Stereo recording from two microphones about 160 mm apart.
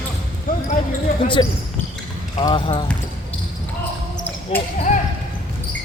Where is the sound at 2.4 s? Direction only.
30° left (ahead or behind).